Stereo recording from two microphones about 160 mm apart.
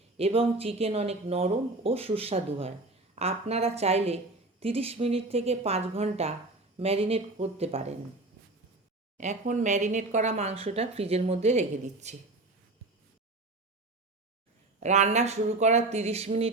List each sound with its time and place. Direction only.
0.2 s speech: 40° right (ahead or behind)
9.1 s speech: 50° right (ahead or behind)
14.8 s speech: 45° right (ahead or behind)